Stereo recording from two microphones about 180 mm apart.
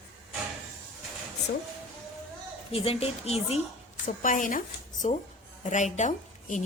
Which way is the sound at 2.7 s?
30° left (ahead or behind).